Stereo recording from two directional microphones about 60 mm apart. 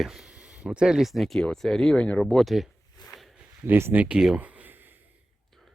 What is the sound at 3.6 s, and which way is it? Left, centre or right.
Speech, right.